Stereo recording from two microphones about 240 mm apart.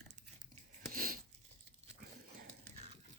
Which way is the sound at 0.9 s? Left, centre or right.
Right.